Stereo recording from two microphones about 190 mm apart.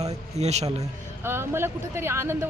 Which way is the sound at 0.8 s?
15° right (ahead or behind).